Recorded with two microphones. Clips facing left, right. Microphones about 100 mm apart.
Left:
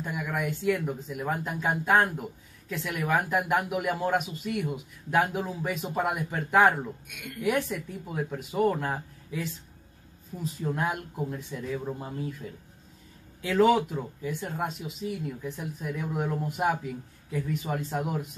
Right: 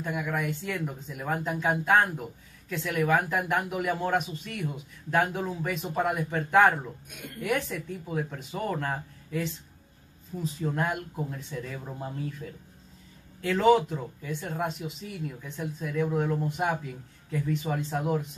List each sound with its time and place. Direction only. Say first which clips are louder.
0.0 s speech: right 1 dB; 5° left (ahead or behind)
7.1 s a woman's voice: left 1 dB; 35° right (ahead or behind)
7.4 s speech: left 2 dB; 5° left (ahead or behind)
13.4 s speech: even; 5° left (ahead or behind)